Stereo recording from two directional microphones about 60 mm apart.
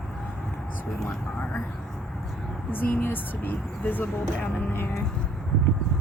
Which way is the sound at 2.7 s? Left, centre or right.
Left.